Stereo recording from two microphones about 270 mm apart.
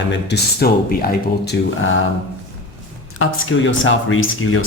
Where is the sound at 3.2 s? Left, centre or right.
Left.